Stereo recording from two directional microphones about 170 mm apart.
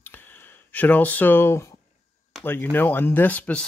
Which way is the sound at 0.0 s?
10° left (ahead or behind).